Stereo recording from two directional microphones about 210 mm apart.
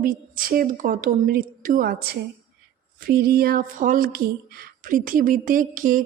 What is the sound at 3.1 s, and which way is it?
Speech, 45° right (ahead or behind).